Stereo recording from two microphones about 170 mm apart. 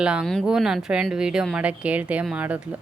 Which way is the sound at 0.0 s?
5° right (ahead or behind).